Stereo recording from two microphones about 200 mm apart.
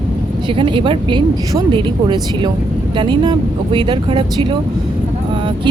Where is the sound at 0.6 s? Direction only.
25° right (ahead or behind).